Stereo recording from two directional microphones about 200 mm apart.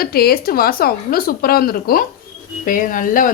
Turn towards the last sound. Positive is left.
turn(degrees=40)  # may be behind; listen again after turning